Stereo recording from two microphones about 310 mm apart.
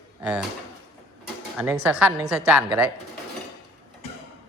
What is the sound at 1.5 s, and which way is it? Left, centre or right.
A woman's voice, centre.